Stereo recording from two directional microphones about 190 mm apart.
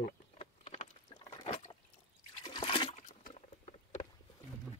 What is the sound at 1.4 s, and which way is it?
Liquid, 25° left (ahead or behind).